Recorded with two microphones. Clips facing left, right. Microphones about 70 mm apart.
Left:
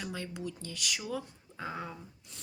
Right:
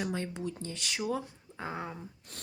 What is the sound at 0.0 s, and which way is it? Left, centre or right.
Speech, right.